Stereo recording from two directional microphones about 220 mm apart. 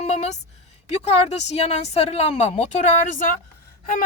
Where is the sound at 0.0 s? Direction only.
30° left (ahead or behind).